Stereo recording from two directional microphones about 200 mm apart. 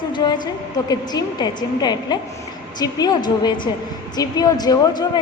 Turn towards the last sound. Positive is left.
turn(degrees=20)  # may be behind; listen again after turning